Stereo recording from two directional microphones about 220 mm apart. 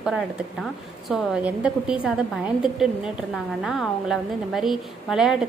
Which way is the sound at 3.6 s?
Centre (ahead or behind).